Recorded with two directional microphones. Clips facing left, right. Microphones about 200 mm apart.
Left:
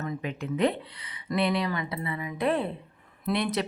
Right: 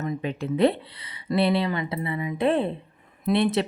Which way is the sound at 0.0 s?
25° right (ahead or behind).